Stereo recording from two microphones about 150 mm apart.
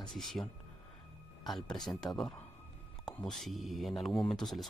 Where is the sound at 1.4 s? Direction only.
Centre (ahead or behind).